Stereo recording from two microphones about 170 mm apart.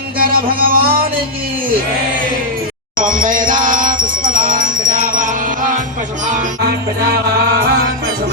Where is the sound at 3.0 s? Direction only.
50° right (ahead or behind).